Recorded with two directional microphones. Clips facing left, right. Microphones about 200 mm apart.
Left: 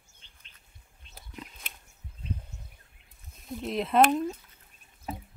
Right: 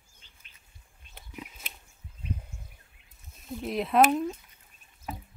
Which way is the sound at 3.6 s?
Centre (ahead or behind).